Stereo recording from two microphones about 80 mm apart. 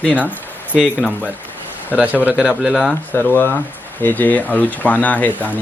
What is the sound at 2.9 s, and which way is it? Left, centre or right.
Speech, left.